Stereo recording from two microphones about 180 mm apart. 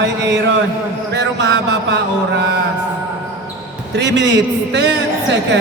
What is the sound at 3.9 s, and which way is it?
Speech, 80° right.